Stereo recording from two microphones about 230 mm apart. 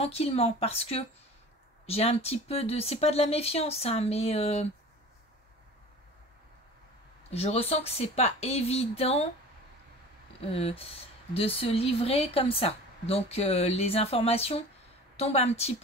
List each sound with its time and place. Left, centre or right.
0.0 s speech: left
7.2 s speech: left
10.4 s speech: left